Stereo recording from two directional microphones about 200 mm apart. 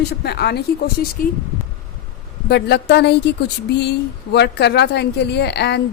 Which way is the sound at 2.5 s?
55° left (ahead or behind).